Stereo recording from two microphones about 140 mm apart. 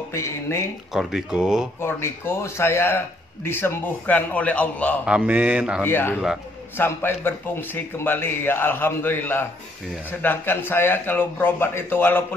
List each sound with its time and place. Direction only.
0.1 s speech: 20° left (ahead or behind)
0.9 s speech: 5° right (ahead or behind)
1.8 s a man's voice: 15° left (ahead or behind)
5.0 s a man's voice: 10° right (ahead or behind)
5.9 s a man's voice: 15° left (ahead or behind)